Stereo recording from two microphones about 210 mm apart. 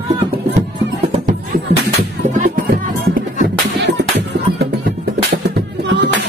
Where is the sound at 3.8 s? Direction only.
55° right (ahead or behind).